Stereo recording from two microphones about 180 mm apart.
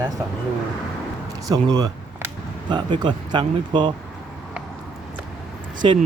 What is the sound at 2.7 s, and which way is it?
Speech, 25° right (ahead or behind).